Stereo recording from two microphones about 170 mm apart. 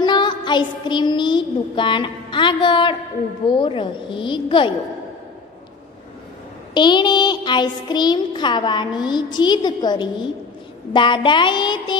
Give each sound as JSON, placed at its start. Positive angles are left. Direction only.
{"t": 0.0, "sound": "child singing", "side_deg": 25}
{"t": 3.4, "sound": "music", "side_deg": 30}
{"t": 6.7, "sound": "music", "side_deg": 25}